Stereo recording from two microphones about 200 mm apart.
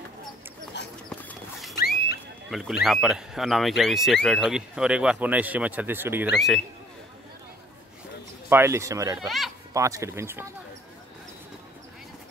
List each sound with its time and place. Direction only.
0.8 s clip-clop: 60° left (ahead or behind)
2.5 s speech: centre (ahead or behind)
6.3 s speech: centre (ahead or behind)
8.5 s speech: 10° right (ahead or behind)
9.2 s speech: centre (ahead or behind)
9.8 s speech: 15° right (ahead or behind)